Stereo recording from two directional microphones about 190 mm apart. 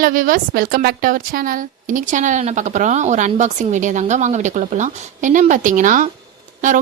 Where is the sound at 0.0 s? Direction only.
45° right (ahead or behind).